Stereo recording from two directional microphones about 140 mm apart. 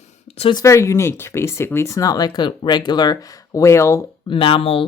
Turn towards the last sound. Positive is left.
turn(degrees=40)  # may be behind; listen again after turning